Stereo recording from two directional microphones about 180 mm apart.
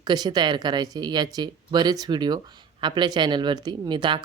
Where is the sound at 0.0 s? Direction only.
25° right (ahead or behind).